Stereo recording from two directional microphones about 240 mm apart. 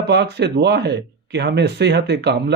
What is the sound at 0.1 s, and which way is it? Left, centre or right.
Speech, right.